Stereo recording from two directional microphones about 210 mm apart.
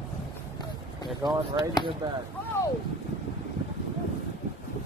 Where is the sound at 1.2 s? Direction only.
20° right (ahead or behind).